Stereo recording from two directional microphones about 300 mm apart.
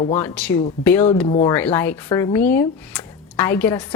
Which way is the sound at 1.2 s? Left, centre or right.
Centre.